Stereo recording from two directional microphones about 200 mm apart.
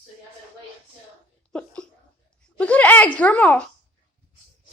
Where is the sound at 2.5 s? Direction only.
5° left (ahead or behind).